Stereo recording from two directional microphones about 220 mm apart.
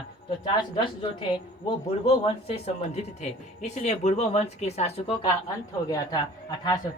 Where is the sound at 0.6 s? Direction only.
20° left (ahead or behind).